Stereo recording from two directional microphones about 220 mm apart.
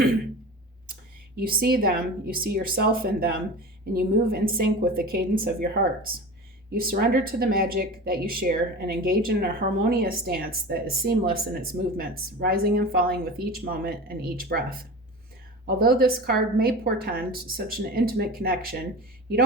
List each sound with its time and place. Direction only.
1.4 s speech: 45° right (ahead or behind)